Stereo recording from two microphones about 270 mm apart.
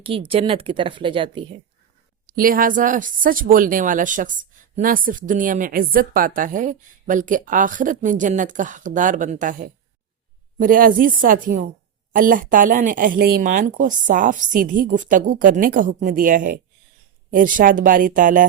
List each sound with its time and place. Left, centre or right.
0.0 s a woman's voice: centre
2.2 s a woman's voice: right